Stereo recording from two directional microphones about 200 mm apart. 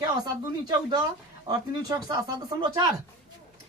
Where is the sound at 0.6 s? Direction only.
20° right (ahead or behind).